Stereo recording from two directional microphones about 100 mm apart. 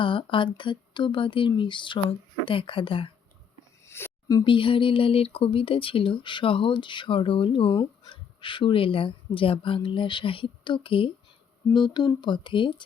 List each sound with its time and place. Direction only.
0.0 s speech: 55° left (ahead or behind)
3.8 s a sound: 25° left (ahead or behind)
4.4 s speech: 60° left (ahead or behind)
11.7 s speech: 45° left (ahead or behind)